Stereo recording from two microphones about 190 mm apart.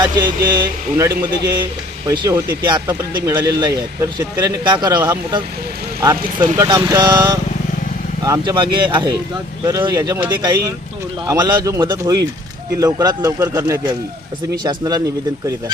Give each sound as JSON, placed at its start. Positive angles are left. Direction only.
{"t": 0.0, "sound": "speech", "side_deg": -20}